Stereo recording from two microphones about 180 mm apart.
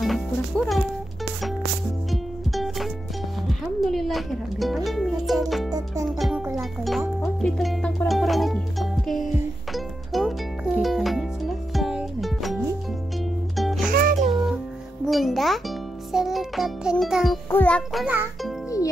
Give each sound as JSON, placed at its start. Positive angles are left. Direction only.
{"t": 0.0, "sound": "music", "side_deg": 0}
{"t": 2.0, "sound": "music", "side_deg": 0}
{"t": 5.7, "sound": "music", "side_deg": -20}
{"t": 6.0, "sound": "music", "side_deg": 0}
{"t": 13.9, "sound": "music", "side_deg": -50}
{"t": 15.0, "sound": "music", "side_deg": 0}
{"t": 18.0, "sound": "music", "side_deg": -10}